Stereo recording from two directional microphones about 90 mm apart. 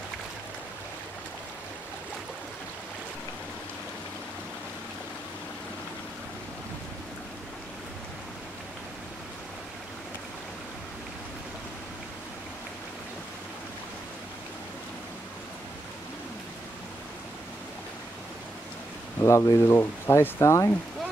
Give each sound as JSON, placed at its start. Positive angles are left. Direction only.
{"t": 19.2, "sound": "speech", "side_deg": 35}